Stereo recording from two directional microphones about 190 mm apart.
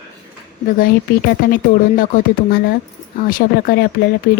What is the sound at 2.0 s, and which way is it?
Speech, 50° left (ahead or behind).